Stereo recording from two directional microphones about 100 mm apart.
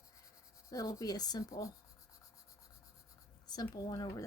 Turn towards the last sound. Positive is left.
turn(degrees=40)  # may be behind; listen again after turning